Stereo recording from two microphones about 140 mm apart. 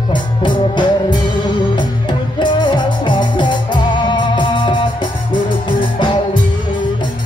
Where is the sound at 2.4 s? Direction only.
35° left (ahead or behind).